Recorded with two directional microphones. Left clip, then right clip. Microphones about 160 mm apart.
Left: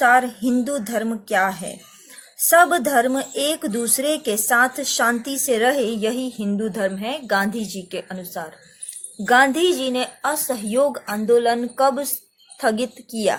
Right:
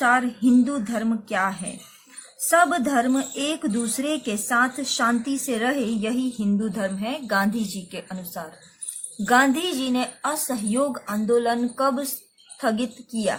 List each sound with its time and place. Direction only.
0.0 s music: 60° left (ahead or behind)
2.5 s a woman's voice: 55° left (ahead or behind)